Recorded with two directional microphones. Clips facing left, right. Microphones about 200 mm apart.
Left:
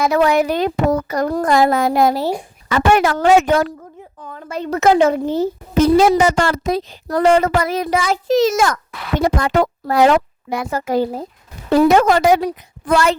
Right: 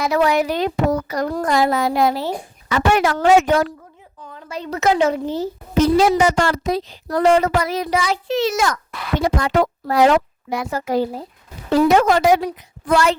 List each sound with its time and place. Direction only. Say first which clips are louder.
0.0 s speech: left 3 dB; 50° left (ahead or behind)